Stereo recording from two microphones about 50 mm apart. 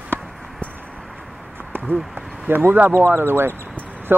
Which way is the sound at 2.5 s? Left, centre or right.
Right.